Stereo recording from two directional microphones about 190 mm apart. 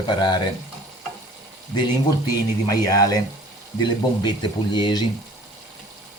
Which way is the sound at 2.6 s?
20° left (ahead or behind).